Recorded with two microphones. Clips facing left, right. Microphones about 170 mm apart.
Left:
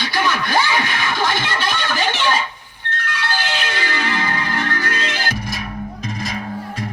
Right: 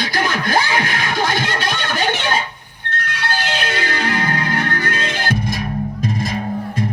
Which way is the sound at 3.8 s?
40° right (ahead or behind).